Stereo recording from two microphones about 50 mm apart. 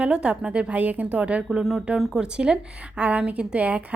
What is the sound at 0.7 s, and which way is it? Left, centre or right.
A woman's voice, right.